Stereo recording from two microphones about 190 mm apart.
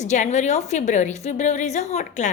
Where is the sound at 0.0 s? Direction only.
40° left (ahead or behind).